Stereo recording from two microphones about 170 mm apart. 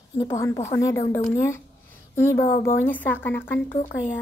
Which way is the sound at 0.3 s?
15° left (ahead or behind).